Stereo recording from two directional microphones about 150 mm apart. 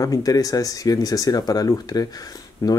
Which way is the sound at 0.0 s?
25° left (ahead or behind).